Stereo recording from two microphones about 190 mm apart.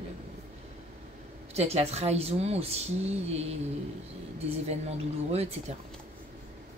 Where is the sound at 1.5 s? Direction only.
35° right (ahead or behind).